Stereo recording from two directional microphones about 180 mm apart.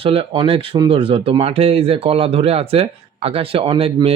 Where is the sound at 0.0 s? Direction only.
30° right (ahead or behind).